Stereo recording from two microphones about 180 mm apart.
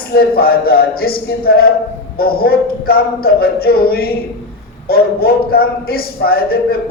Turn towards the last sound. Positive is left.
turn(degrees=60)  # may be behind; listen again after turning